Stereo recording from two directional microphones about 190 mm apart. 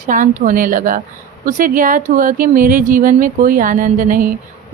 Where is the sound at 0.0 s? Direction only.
45° right (ahead or behind).